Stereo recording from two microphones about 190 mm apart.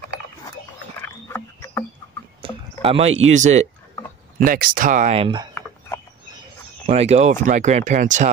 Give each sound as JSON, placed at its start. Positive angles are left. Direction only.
{"t": 1.0, "sound": "frog", "side_deg": 10}
{"t": 2.4, "sound": "a sound", "side_deg": -30}
{"t": 3.3, "sound": "speech", "side_deg": -40}
{"t": 6.9, "sound": "speech", "side_deg": -35}